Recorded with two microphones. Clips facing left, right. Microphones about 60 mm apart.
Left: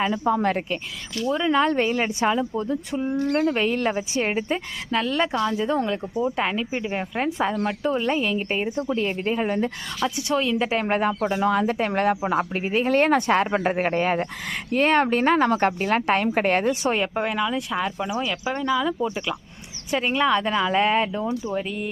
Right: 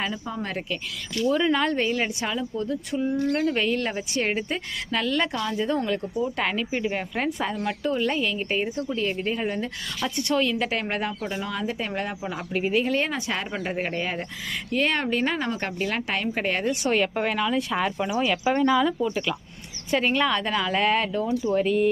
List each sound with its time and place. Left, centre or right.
0.1 s speech: left
1.5 s a woman's voice: left
3.9 s a woman's voice: centre
7.3 s a woman's voice: left
10.2 s a woman's voice: centre
10.8 s speech: left
11.4 s speech: left
12.4 s speech: left
16.9 s a woman's voice: centre
17.2 s speech: centre
18.9 s a woman's voice: centre
21.5 s speech: centre